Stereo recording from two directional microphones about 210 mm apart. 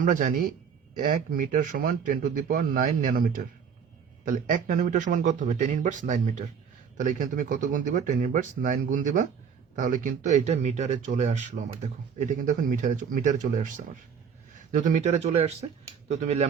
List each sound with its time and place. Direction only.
0.0 s a man's voice: 40° right (ahead or behind)